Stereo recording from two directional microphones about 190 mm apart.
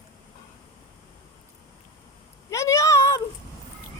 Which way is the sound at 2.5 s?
15° left (ahead or behind).